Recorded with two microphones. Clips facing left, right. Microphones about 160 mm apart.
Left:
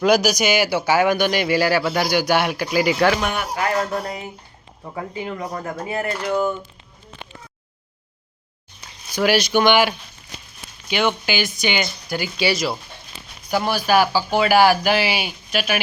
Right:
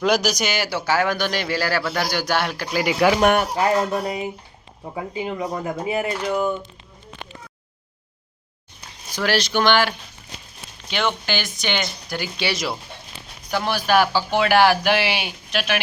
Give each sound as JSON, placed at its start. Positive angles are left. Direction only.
{"t": 0.0, "sound": "speech", "side_deg": 5}
{"t": 2.8, "sound": "speech", "side_deg": -10}
{"t": 3.2, "sound": "speech", "side_deg": -50}
{"t": 3.5, "sound": "speech", "side_deg": -25}
{"t": 9.1, "sound": "speech", "side_deg": 10}